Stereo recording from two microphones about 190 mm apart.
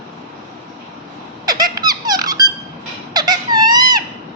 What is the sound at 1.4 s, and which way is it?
Squeak, 20° right (ahead or behind).